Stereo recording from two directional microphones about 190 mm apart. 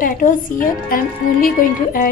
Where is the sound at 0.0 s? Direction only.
45° left (ahead or behind).